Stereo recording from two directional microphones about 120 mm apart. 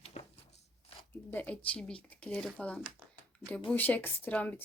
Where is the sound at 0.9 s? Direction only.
50° left (ahead or behind).